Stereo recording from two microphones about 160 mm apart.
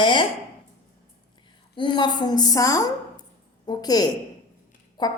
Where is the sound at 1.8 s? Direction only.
30° left (ahead or behind).